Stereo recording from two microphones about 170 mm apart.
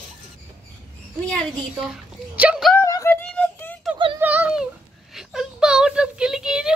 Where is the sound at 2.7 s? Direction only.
15° left (ahead or behind).